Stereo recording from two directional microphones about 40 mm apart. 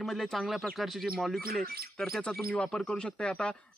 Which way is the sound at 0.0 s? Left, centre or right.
Centre.